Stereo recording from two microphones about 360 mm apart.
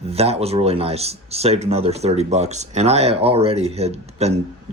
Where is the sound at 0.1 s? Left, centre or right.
Centre.